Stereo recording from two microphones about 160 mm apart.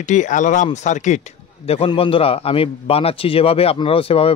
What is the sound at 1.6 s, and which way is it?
Speech, 35° left (ahead or behind).